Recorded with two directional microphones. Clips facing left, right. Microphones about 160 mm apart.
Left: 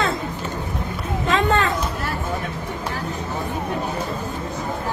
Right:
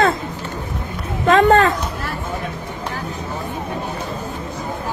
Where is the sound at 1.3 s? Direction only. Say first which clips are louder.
Right 7 dB; 50° right (ahead or behind).